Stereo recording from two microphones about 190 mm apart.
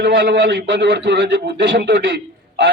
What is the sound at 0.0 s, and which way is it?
A man's voice, 70° right (ahead or behind).